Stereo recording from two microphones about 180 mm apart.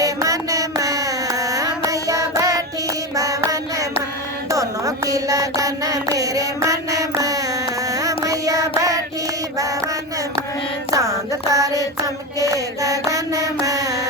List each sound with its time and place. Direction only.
0.0 s music: 20° right (ahead or behind)
3.2 s a sound: 20° right (ahead or behind)
4.5 s music: 20° right (ahead or behind)
7.9 s child singing: 20° right (ahead or behind)
10.9 s a sound: 20° right (ahead or behind)
12.0 s mantra: 20° right (ahead or behind)